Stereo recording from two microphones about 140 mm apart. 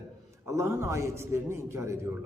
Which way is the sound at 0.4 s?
20° right (ahead or behind).